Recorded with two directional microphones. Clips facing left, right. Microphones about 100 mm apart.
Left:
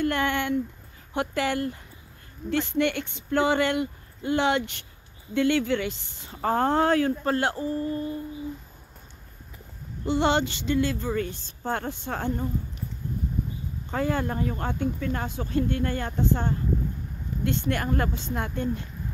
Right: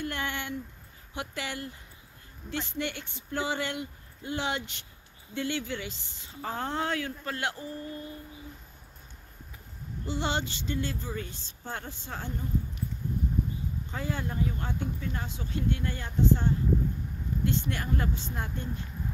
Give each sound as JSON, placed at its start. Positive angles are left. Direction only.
{"t": 0.0, "sound": "speech", "side_deg": 60}
{"t": 10.0, "sound": "speech", "side_deg": 65}
{"t": 13.8, "sound": "speech", "side_deg": 60}